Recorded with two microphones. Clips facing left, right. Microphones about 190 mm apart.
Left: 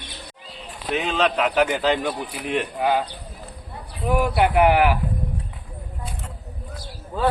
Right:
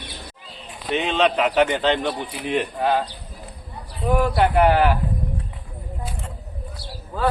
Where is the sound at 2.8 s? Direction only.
10° left (ahead or behind).